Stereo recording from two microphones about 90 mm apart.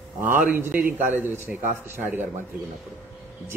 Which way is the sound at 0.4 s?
20° right (ahead or behind).